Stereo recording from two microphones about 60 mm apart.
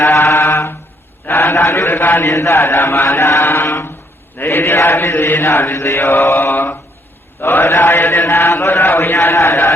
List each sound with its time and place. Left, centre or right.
0.0 s mantra: left
1.3 s a man's voice: left
1.6 s chant: left
1.9 s chant: left
2.2 s chant: left
6.5 s chant: left